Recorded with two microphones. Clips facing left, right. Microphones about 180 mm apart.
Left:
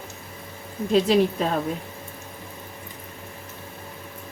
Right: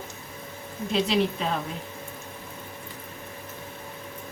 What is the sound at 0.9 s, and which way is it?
Speech, 45° left (ahead or behind).